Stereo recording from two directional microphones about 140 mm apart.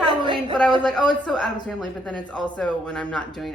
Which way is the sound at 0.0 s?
35° right (ahead or behind).